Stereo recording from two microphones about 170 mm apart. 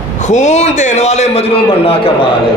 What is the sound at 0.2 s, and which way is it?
A man's voice, 45° left (ahead or behind).